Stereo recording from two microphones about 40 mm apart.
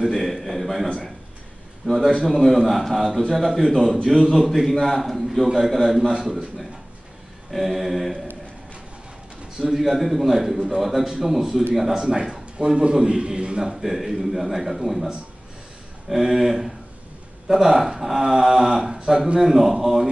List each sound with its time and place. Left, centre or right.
0.1 s a man's voice: centre
1.9 s a man's voice: centre
9.6 s a man's voice: centre
12.5 s a man's voice: right
13.6 s a man's voice: centre
16.1 s speech: centre
18.9 s a man's voice: right
19.4 s speech: centre